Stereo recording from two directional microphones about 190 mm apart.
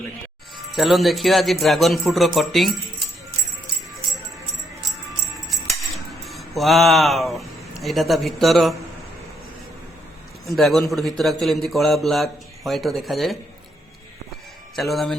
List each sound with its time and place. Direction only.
0.8 s a man's voice: centre (ahead or behind)
4.9 s music: centre (ahead or behind)
6.2 s speech: centre (ahead or behind)
10.4 s a man's voice: centre (ahead or behind)
14.8 s a man's voice: centre (ahead or behind)